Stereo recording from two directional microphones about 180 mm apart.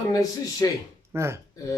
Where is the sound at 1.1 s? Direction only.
15° right (ahead or behind).